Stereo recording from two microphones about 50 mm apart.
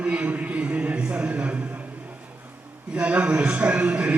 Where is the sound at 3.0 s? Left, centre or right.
Right.